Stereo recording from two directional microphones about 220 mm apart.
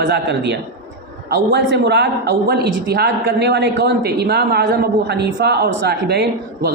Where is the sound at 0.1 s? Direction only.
50° right (ahead or behind).